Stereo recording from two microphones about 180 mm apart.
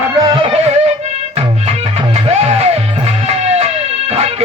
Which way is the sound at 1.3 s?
35° right (ahead or behind).